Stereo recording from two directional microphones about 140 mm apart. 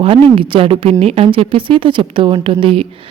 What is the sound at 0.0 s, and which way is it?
Speech, 40° right (ahead or behind).